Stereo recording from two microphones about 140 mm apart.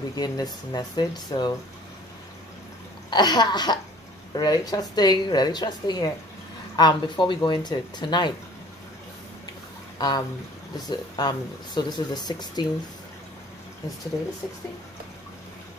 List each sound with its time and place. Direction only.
0.1 s a woman's voice: 25° left (ahead or behind)
3.1 s a woman's voice: 30° left (ahead or behind)
9.9 s speech: 30° left (ahead or behind)